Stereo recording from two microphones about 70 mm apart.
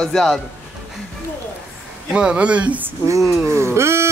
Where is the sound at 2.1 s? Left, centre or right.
Centre.